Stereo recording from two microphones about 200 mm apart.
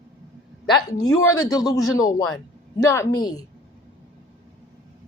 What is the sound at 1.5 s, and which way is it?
Speech, 20° left (ahead or behind).